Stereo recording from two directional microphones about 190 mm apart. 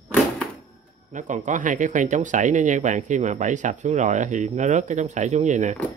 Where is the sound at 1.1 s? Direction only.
40° right (ahead or behind).